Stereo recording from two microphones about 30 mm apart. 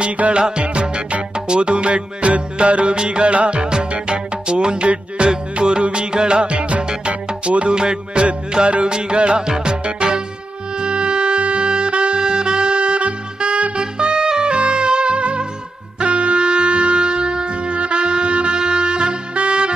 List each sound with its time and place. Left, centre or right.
0.0 s music: right
7.7 s music: right
10.8 s saxophone: right
16.0 s wind instrument: right
18.6 s saxophone: right